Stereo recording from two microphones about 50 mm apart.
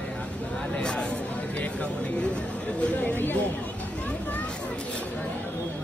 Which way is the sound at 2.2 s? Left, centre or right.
Left.